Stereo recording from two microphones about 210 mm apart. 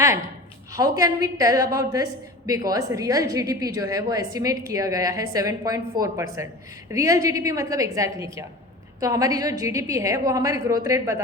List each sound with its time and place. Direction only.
0.7 s a woman's voice: 15° right (ahead or behind)